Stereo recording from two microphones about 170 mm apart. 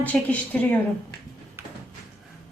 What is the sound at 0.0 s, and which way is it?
Speech, 10° left (ahead or behind).